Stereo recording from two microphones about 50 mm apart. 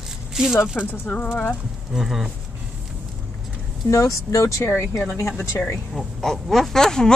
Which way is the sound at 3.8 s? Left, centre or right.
Left.